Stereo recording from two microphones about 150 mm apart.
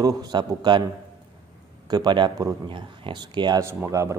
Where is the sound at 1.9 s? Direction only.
30° right (ahead or behind).